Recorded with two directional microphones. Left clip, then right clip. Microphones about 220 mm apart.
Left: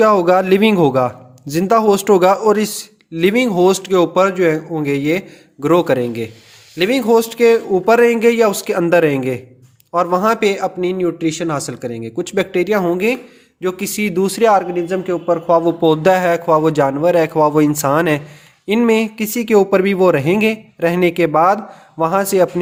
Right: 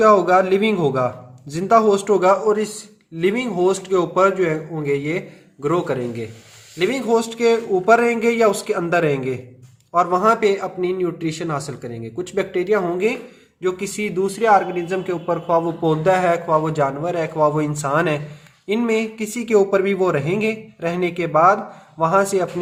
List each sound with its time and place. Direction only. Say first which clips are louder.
0.0 s a man's voice: left 2 dB; 40° left (ahead or behind)